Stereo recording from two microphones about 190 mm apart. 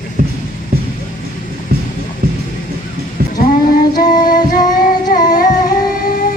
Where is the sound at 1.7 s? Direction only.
50° right (ahead or behind).